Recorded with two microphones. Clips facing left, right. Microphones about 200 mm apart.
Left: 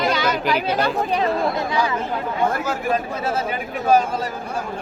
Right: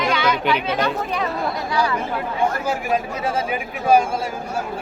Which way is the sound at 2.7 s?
10° right (ahead or behind).